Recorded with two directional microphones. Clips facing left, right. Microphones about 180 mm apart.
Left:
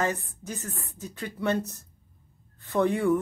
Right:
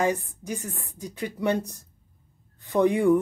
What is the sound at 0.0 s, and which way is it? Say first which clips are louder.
A woman's voice: right 4 dB; 15° right (ahead or behind).